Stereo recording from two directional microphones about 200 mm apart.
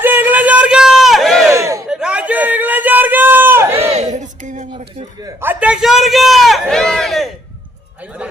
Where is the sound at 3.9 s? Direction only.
35° right (ahead or behind).